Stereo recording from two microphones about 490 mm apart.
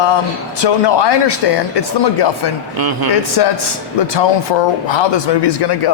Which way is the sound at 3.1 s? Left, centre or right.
Left.